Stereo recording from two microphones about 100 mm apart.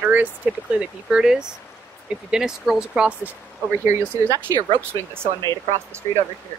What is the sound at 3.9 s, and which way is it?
Speech, 35° right (ahead or behind).